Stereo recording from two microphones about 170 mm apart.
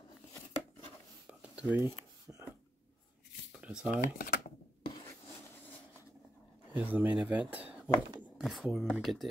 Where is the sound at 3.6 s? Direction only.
5° right (ahead or behind).